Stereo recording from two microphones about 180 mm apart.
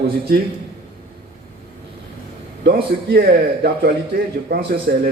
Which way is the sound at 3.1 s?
60° right (ahead or behind).